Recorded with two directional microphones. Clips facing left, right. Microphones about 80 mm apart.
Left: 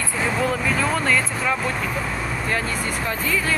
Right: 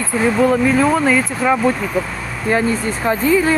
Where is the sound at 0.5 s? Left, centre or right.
Centre.